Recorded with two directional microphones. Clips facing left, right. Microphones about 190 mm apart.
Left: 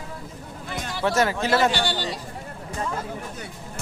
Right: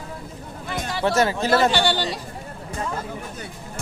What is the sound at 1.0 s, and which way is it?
Speech, 25° right (ahead or behind).